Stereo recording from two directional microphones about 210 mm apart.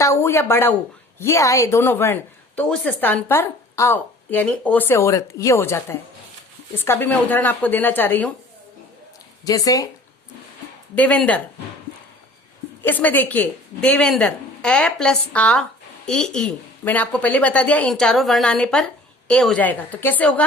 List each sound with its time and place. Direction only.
0.0 s a woman's voice: 10° left (ahead or behind)
9.4 s a woman's voice: 15° left (ahead or behind)
10.9 s a woman's voice: 5° left (ahead or behind)
12.8 s a woman's voice: 10° left (ahead or behind)